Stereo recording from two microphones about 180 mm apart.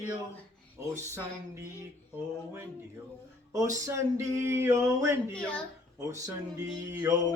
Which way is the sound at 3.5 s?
15° right (ahead or behind).